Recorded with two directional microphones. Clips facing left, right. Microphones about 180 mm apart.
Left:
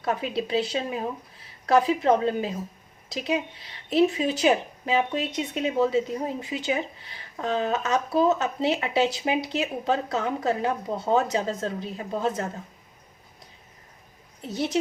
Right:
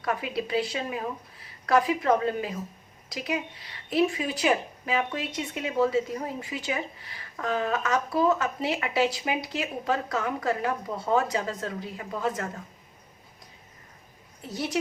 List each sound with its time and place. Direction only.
0.0 s speech: 25° left (ahead or behind)
14.4 s speech: 25° left (ahead or behind)